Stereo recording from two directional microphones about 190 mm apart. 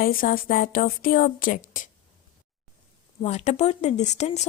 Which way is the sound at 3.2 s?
35° left (ahead or behind).